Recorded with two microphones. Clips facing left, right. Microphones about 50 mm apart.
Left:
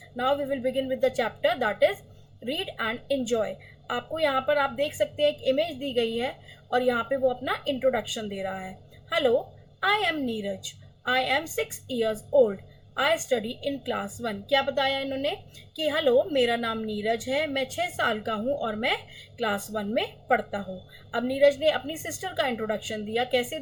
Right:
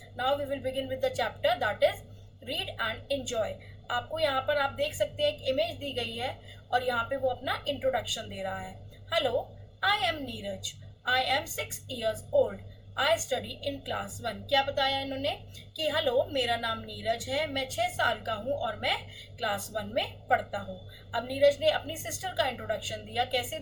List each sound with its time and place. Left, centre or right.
1.0 s a woman's voice: left